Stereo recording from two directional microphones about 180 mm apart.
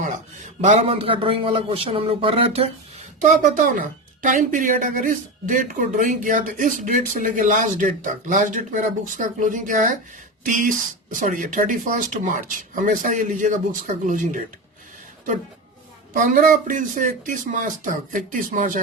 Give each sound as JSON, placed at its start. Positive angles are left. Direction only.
{"t": 0.0, "sound": "a man's voice", "side_deg": -40}
{"t": 3.2, "sound": "a woman's voice", "side_deg": -45}
{"t": 16.1, "sound": "a woman's voice", "side_deg": -50}